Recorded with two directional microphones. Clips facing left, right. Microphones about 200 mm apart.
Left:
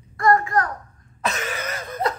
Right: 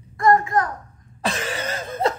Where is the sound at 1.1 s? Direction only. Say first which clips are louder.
Right 1 dB; 30° right (ahead or behind).